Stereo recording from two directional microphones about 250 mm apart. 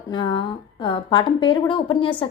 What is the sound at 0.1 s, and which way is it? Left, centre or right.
A woman's voice, centre.